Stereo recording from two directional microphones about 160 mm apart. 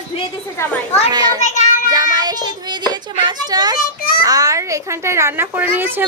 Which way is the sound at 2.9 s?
25° right (ahead or behind).